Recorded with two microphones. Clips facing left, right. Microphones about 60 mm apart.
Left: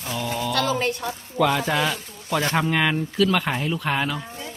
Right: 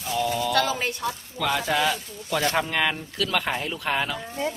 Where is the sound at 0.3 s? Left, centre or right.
Centre.